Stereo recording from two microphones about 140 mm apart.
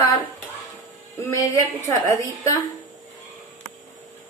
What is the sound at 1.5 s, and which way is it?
A woman's voice, 20° left (ahead or behind).